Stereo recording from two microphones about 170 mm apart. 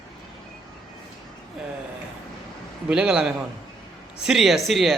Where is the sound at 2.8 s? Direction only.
5° right (ahead or behind).